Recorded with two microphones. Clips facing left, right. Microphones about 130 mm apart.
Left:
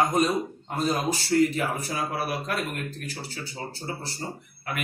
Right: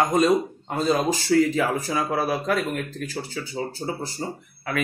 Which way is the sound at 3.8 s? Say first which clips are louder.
Right 4 dB; 55° right (ahead or behind).